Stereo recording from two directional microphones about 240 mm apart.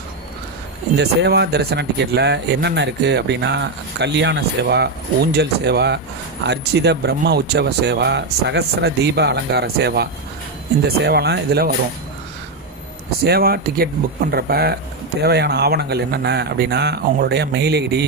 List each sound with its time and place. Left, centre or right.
0.9 s speech: right
13.2 s speech: right